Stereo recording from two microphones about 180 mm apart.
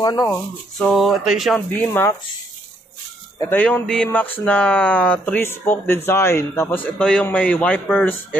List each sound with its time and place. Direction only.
0.0 s a sound: 20° left (ahead or behind)
0.7 s speech: centre (ahead or behind)
1.7 s speech: 10° left (ahead or behind)
3.3 s speech: 10° left (ahead or behind)